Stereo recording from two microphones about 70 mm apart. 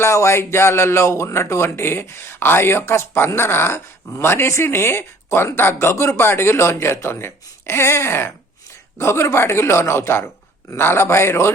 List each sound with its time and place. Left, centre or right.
0.0 s speech: left